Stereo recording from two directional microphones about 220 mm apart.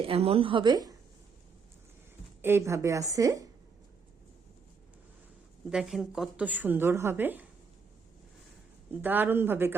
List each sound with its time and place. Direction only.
0.0 s a woman's voice: 25° right (ahead or behind)
2.4 s a woman's voice: 10° right (ahead or behind)
5.7 s a woman's voice: 5° right (ahead or behind)
9.0 s a woman's voice: 10° right (ahead or behind)